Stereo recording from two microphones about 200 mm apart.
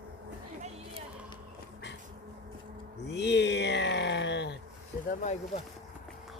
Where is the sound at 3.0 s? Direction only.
60° left (ahead or behind).